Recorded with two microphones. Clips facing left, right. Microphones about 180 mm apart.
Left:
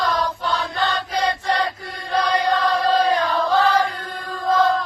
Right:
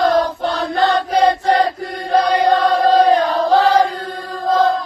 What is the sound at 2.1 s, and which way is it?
Chant, 55° right (ahead or behind).